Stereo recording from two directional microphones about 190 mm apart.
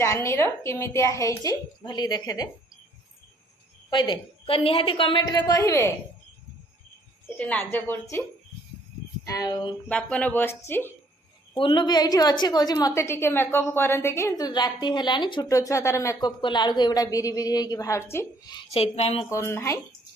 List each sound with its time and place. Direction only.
0.0 s a woman's voice: 15° left (ahead or behind)
3.9 s a woman's voice: 25° left (ahead or behind)
7.3 s a woman's voice: 5° left (ahead or behind)
9.8 s a woman's voice: 5° left (ahead or behind)
11.5 s a woman's voice: 25° left (ahead or behind)
19.3 s a woman's voice: 15° left (ahead or behind)